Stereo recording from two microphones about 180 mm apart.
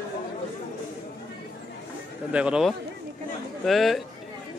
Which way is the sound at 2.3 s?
5° right (ahead or behind).